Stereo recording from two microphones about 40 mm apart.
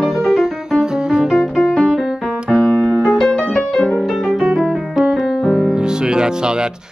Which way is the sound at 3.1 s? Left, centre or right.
Centre.